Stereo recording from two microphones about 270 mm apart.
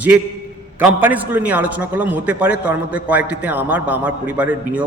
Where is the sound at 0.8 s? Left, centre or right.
Centre.